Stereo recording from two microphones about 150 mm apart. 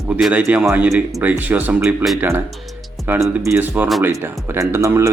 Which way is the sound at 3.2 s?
Centre (ahead or behind).